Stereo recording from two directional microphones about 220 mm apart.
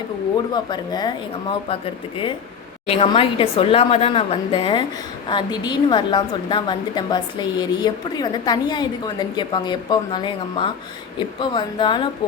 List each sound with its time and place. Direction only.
0.5 s a woman's voice: 20° left (ahead or behind)
2.8 s a woman's voice: 25° left (ahead or behind)